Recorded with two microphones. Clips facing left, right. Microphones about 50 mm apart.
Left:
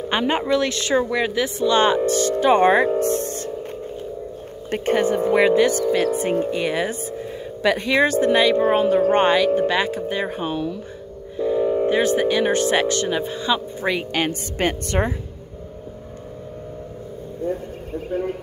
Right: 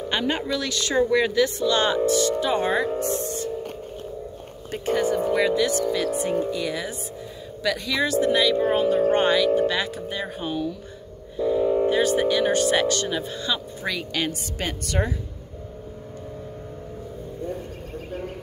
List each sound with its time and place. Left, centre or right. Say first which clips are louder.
0.1 s speech: left 6 dB; left
1.1 s speech: right 1 dB; centre
1.7 s speech: left 3 dB; left
3.0 s music: left 4 dB; left
4.6 s speech: left 4 dB; left
11.3 s a sound: left 1 dB; centre
11.9 s speech: left 2 dB; left